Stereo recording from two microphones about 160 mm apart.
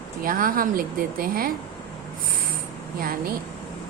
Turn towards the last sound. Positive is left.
turn(degrees=-65)  # may be behind; listen again after turning